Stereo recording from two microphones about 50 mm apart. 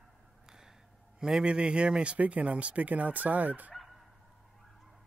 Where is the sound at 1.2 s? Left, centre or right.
Centre; by 3.7 s right.